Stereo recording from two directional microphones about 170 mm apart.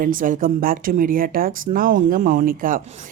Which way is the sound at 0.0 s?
55° right (ahead or behind).